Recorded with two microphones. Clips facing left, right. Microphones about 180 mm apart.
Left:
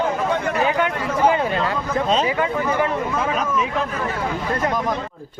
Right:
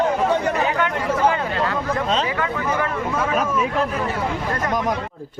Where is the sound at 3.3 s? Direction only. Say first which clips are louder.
Right 2 dB; 5° right (ahead or behind).